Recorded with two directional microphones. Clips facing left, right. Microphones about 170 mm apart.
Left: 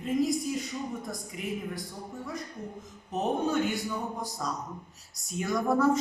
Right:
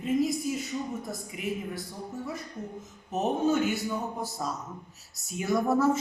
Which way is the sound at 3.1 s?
5° right (ahead or behind).